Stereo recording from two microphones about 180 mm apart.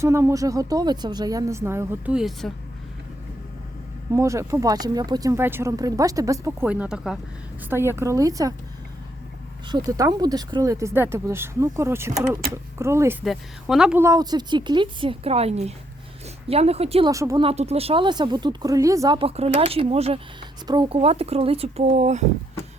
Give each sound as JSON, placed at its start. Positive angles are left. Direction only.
{"t": 0.0, "sound": "speech", "side_deg": -15}
{"t": 4.1, "sound": "speech", "side_deg": -15}
{"t": 7.7, "sound": "speech", "side_deg": -15}
{"t": 9.7, "sound": "speech", "side_deg": -20}
{"t": 13.2, "sound": "a woman's voice", "side_deg": 0}
{"t": 14.0, "sound": "speech", "side_deg": -20}
{"t": 17.1, "sound": "speech", "side_deg": -15}
{"t": 17.4, "sound": "speech", "side_deg": -35}